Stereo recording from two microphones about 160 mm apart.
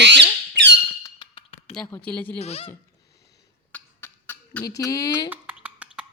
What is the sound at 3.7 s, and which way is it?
Cough, 10° left (ahead or behind).